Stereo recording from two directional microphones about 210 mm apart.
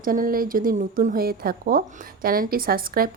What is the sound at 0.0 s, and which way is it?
A woman's voice, 40° right (ahead or behind).